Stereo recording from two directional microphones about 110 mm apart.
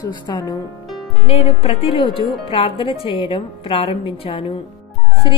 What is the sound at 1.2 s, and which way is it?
A woman's voice, 65° left (ahead or behind).